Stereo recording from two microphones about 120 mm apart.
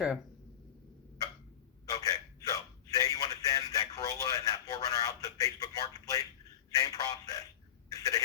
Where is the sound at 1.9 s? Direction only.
30° left (ahead or behind).